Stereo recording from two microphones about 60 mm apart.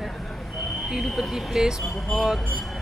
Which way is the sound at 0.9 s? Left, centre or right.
Centre.